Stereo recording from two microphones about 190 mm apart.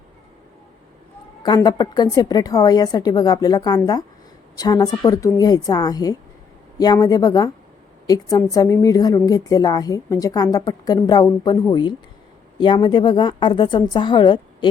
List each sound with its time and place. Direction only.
1.5 s a woman's voice: 20° left (ahead or behind)